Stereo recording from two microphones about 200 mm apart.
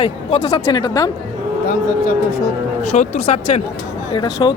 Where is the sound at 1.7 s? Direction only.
40° left (ahead or behind).